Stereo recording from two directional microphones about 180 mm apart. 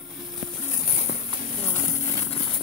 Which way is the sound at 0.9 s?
35° left (ahead or behind).